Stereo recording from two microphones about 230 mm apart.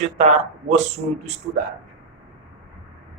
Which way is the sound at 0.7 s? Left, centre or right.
Right.